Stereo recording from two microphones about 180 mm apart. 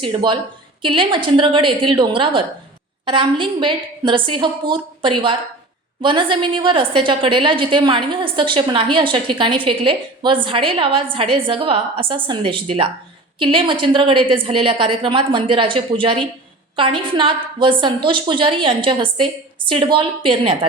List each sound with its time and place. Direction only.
0.0 s a woman's voice: 25° right (ahead or behind)